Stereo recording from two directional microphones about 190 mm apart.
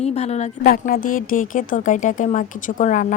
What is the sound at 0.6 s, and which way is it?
Speech, 50° left (ahead or behind).